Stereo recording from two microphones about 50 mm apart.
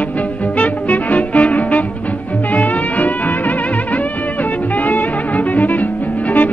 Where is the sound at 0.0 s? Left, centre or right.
Left.